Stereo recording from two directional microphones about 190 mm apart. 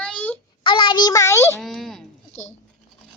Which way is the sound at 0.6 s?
25° left (ahead or behind).